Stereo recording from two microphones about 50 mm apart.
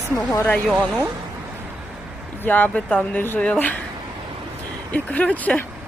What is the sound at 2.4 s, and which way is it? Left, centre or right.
Speech, left.